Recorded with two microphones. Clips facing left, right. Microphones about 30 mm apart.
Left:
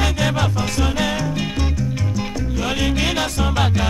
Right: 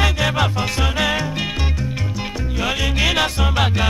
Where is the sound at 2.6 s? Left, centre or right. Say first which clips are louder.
Right 2 dB; centre.